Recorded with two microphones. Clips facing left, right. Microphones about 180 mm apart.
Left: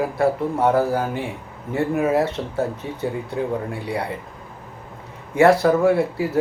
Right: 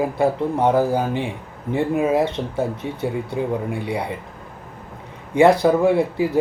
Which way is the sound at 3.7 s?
15° right (ahead or behind).